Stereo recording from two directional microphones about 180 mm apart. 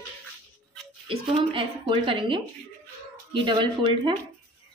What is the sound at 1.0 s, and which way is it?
A woman's voice, 30° right (ahead or behind).